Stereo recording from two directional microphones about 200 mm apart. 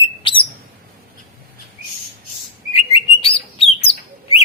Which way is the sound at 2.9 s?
30° left (ahead or behind).